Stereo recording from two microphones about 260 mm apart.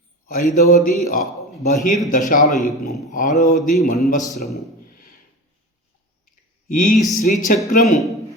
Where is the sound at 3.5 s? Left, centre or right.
Left.